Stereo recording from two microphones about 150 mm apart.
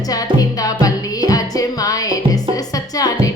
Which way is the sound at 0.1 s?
25° left (ahead or behind).